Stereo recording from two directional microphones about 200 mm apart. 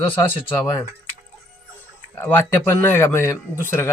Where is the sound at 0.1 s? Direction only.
25° left (ahead or behind).